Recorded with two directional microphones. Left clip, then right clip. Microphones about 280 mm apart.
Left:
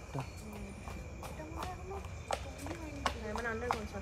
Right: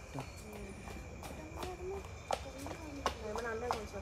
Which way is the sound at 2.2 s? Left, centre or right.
Right.